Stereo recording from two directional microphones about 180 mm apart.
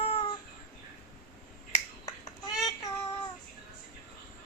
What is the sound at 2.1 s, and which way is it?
Babbling, 15° left (ahead or behind).